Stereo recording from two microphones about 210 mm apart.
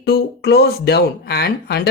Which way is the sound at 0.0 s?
50° left (ahead or behind).